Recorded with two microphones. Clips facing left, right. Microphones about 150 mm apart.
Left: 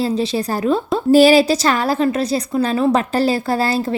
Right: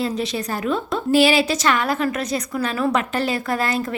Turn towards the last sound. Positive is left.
turn(degrees=30)  # may be behind; listen again after turning